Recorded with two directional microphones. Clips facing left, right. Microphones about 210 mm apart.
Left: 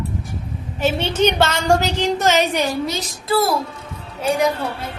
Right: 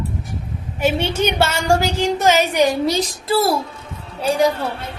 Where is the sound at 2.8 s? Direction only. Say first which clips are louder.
Right 5 dB; 30° right (ahead or behind).